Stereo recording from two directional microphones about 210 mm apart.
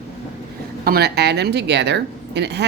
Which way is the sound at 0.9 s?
50° right (ahead or behind).